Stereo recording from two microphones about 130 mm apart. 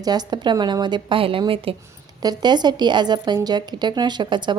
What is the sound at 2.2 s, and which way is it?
A woman's voice, 35° right (ahead or behind).